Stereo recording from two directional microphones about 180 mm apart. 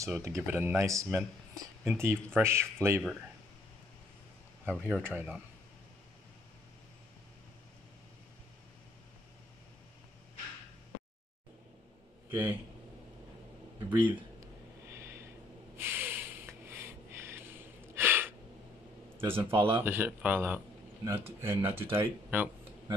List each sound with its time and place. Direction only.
0.0 s speech: 15° right (ahead or behind)
3.0 s speech: centre (ahead or behind)
4.6 s speech: 10° right (ahead or behind)
13.8 s a sound: 15° right (ahead or behind)
15.8 s rub: 10° right (ahead or behind)
17.9 s a sound: 10° right (ahead or behind)
19.1 s speech: 10° right (ahead or behind)